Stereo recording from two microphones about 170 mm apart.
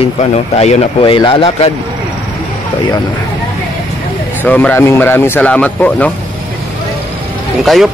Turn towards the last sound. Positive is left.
turn(degrees=0)  # may be behind; listen again after turning